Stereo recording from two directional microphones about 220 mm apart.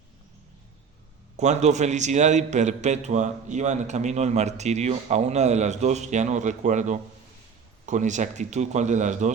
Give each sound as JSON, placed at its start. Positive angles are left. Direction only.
{"t": 1.4, "sound": "a man's voice", "side_deg": -30}